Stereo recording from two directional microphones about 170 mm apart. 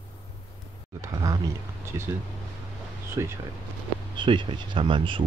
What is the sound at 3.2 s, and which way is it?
Speech, 20° right (ahead or behind).